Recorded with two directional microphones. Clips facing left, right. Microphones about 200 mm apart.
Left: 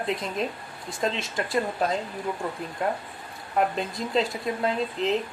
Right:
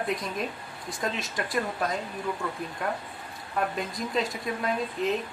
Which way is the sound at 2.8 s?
30° left (ahead or behind).